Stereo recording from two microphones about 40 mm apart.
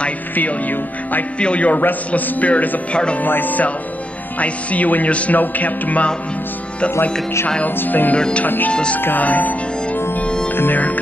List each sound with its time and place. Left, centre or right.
0.4 s speech: left
1.4 s speech: left
1.8 s speech: left
2.9 s speech: left
3.2 s speech: left
7.6 s speech: left
8.2 s speech: left
9.2 s speech: left
10.2 s music: centre
10.5 s speech: left